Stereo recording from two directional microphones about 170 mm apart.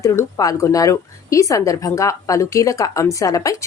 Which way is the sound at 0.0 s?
15° left (ahead or behind).